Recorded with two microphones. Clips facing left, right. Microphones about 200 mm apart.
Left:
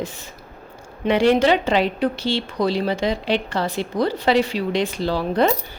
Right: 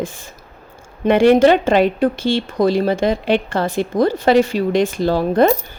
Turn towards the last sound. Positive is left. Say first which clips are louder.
# right 5 dB
turn(degrees=-50)  # may be behind; listen again after turning